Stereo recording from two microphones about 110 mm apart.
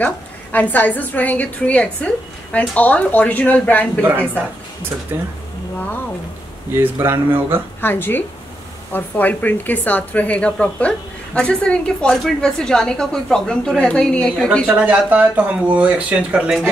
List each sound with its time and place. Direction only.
0.0 s a woman's voice: 15° left (ahead or behind)
5.1 s speech: 20° right (ahead or behind)
6.8 s speech: 20° right (ahead or behind)
7.8 s speech: 20° left (ahead or behind)
14.7 s speech: 15° right (ahead or behind)